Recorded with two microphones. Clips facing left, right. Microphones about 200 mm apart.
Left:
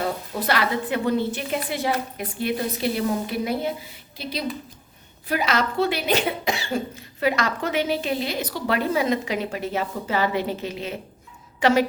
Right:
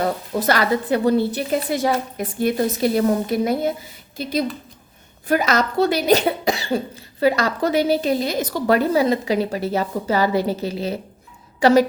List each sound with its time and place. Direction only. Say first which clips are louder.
0.0 s a woman's voice: right 5 dB; 45° right (ahead or behind)